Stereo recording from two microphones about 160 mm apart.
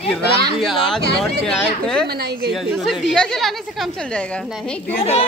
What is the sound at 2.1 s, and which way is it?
Speech, 85° right.